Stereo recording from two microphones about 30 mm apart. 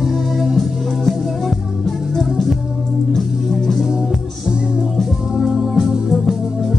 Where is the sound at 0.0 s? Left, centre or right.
Centre.